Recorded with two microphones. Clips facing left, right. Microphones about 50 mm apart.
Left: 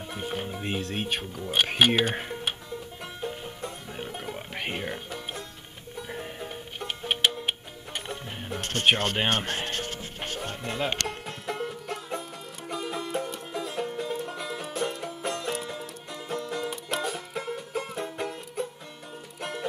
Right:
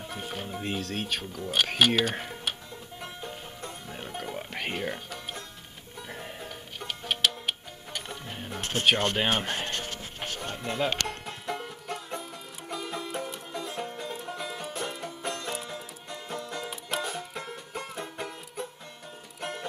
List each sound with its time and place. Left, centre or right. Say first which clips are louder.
0.1 s speech: left 4 dB; centre
3.0 s music: left 2 dB; centre
7.1 s music: left 2 dB; centre
8.5 s a sound: even; centre
9.3 s music: left 1 dB; centre